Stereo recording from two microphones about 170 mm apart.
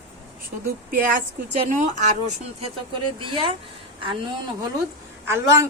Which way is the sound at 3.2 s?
30° right (ahead or behind).